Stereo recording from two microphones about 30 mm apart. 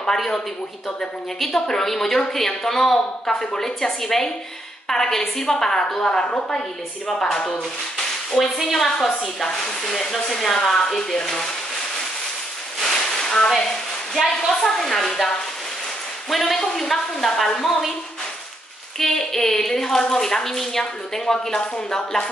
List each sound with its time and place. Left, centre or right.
1.5 s a woman's voice: centre
8.4 s a woman's voice: centre
8.8 s a woman's voice: centre
11.0 s a woman's voice: left
11.2 s a woman's voice: centre
12.8 s a sound: centre
14.1 s a woman's voice: centre
14.5 s a woman's voice: centre
17.6 s a woman's voice: centre
18.9 s a woman's voice: centre